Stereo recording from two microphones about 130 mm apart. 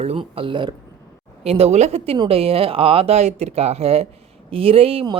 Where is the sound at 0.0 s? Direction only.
50° right (ahead or behind).